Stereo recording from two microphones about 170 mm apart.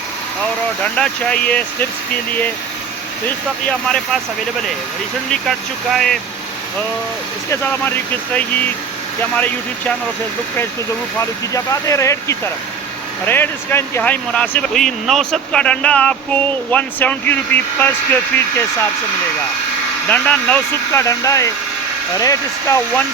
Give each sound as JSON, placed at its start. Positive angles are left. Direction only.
{"t": 0.9, "sound": "speech", "side_deg": 5}
{"t": 3.7, "sound": "speech", "side_deg": 5}
{"t": 5.3, "sound": "speech", "side_deg": 0}
{"t": 7.5, "sound": "speech", "side_deg": 10}
{"t": 11.2, "sound": "speech", "side_deg": 20}
{"t": 20.1, "sound": "speech", "side_deg": 10}